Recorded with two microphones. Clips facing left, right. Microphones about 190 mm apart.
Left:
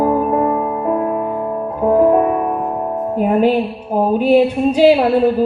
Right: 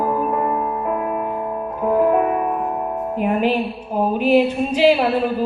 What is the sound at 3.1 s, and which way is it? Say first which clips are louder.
Female singing: left 5 dB; 40° left (ahead or behind).